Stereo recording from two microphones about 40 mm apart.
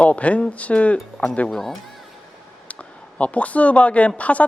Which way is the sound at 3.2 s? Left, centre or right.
Left.